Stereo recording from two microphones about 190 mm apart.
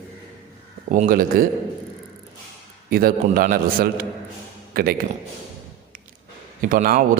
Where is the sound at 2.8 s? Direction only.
50° right (ahead or behind).